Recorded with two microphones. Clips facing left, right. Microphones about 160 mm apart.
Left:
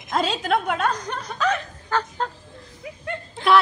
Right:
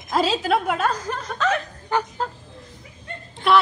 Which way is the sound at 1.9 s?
15° right (ahead or behind).